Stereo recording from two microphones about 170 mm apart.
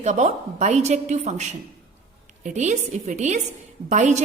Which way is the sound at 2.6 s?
45° right (ahead or behind).